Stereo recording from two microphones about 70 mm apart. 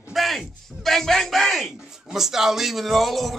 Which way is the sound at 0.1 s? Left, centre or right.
Centre.